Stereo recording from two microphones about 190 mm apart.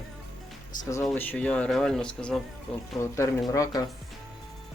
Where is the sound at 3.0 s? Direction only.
15° left (ahead or behind).